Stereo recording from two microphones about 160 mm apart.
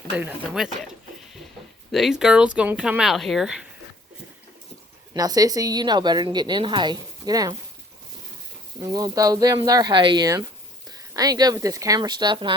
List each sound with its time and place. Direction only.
0.2 s speech: 5° right (ahead or behind)
1.9 s speech: centre (ahead or behind)
5.1 s a woman's voice: 25° right (ahead or behind)
8.8 s a woman's voice: 25° right (ahead or behind)